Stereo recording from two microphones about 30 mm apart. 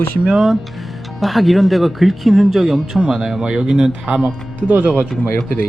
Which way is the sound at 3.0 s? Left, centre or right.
Centre.